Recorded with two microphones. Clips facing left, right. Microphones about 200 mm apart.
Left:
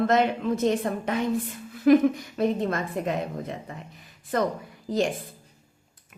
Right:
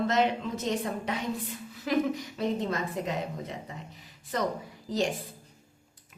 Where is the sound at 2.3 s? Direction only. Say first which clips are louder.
Left 5 dB; 55° left (ahead or behind).